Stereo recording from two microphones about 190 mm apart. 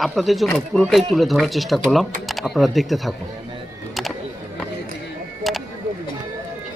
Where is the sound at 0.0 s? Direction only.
Centre (ahead or behind).